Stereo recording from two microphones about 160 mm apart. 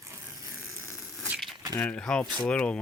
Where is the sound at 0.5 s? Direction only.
Centre (ahead or behind).